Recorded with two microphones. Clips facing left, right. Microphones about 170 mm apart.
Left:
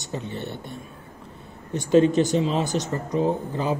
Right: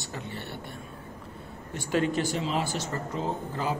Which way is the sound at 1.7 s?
20° left (ahead or behind).